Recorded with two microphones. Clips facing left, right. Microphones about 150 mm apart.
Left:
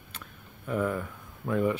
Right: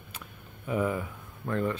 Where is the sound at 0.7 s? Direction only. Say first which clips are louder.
Even; 5° right (ahead or behind).